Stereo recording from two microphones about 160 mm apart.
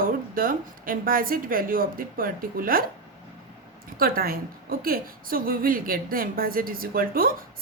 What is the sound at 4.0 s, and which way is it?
A woman's voice, 65° right (ahead or behind).